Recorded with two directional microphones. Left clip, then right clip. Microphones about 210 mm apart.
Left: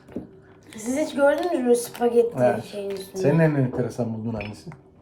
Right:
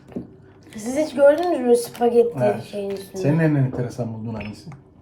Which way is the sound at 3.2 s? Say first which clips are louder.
Left 1 dB; 20° left (ahead or behind).